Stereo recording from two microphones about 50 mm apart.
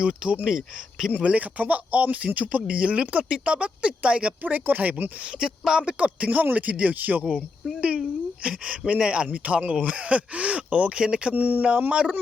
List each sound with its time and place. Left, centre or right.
0.0 s speech: centre
1.1 s speech: right
5.4 s speech: centre
6.0 s speech: right
11.3 s speech: right
11.6 s speech: right